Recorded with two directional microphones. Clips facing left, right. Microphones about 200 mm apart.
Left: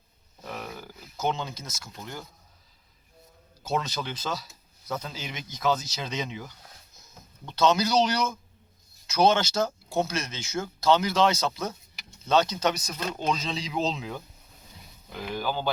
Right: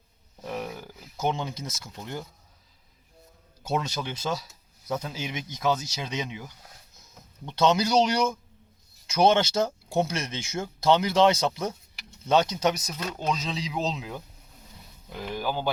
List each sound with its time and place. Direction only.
0.4 s speech: 15° right (ahead or behind)
3.6 s speech: 10° right (ahead or behind)
15.4 s speech: 15° right (ahead or behind)